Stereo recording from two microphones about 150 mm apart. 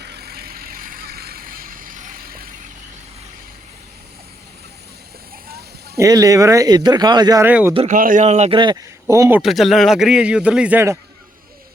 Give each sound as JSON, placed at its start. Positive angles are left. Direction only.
{"t": 0.0, "sound": "vehicle", "side_deg": -90}
{"t": 6.0, "sound": "speech", "side_deg": -25}
{"t": 7.4, "sound": "speech", "side_deg": -15}
{"t": 7.9, "sound": "speech", "side_deg": -65}
{"t": 8.5, "sound": "a man's voice", "side_deg": -30}
{"t": 9.0, "sound": "speech", "side_deg": -20}
{"t": 9.4, "sound": "a man's voice", "side_deg": 0}